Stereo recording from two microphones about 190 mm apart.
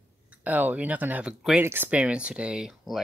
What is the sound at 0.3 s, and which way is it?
Speech, 10° right (ahead or behind).